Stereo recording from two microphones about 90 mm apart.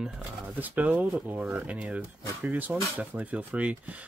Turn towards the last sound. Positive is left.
turn(degrees=-15)  # may be behind; listen again after turning